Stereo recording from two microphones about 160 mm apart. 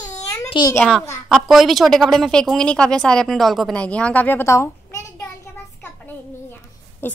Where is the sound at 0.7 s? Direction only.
Centre (ahead or behind); by 5.0 s 15° left (ahead or behind).